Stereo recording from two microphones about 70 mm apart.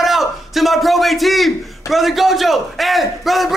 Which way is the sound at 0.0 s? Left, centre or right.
Centre.